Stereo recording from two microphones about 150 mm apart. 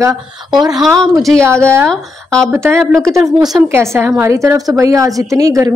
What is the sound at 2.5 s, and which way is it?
A woman's voice, 15° right (ahead or behind).